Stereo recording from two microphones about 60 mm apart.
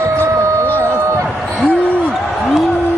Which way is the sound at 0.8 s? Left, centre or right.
Right.